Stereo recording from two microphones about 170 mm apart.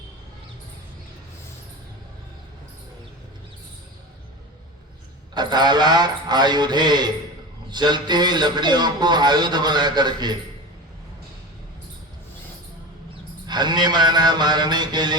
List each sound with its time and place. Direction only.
5.3 s a man's voice: 25° right (ahead or behind)
13.5 s a man's voice: 25° right (ahead or behind)